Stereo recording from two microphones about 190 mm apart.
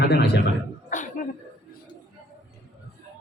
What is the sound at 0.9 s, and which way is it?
Speech, 40° left (ahead or behind).